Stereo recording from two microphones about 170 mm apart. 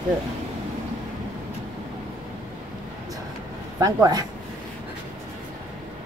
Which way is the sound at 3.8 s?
20° right (ahead or behind).